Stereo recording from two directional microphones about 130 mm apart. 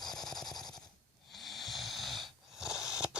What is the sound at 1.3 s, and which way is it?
Snoring, centre (ahead or behind).